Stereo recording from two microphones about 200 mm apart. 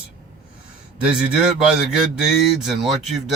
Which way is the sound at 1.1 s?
5° right (ahead or behind).